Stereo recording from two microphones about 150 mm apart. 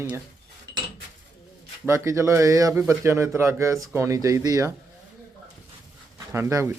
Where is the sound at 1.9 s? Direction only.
20° right (ahead or behind).